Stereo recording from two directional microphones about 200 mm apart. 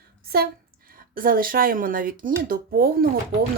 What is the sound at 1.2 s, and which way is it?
Speech, 45° right (ahead or behind).